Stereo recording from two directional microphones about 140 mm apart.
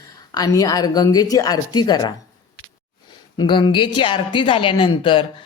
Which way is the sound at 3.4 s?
35° left (ahead or behind).